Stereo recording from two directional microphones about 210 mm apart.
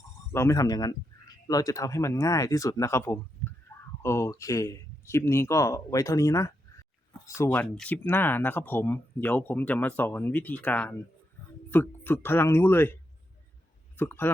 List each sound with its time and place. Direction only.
0.3 s speech: 15° left (ahead or behind)
3.7 s a sound: 10° left (ahead or behind)
4.0 s speech: 15° left (ahead or behind)